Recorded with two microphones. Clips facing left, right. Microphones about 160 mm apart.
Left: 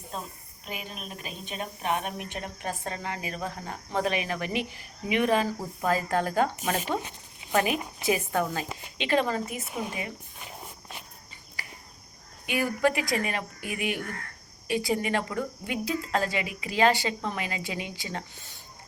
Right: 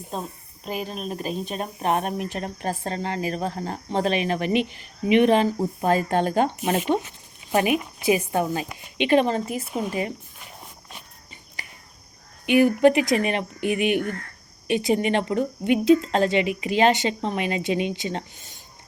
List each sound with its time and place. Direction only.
0.1 s a woman's voice: 35° right (ahead or behind)
12.5 s a woman's voice: 20° right (ahead or behind)